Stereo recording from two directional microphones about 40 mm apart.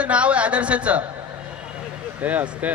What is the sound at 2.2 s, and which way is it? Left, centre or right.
Speech, right.